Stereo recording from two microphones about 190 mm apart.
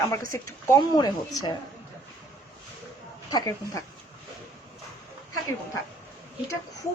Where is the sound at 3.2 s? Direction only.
20° left (ahead or behind).